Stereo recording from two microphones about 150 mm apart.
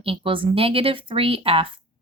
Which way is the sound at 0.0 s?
35° right (ahead or behind).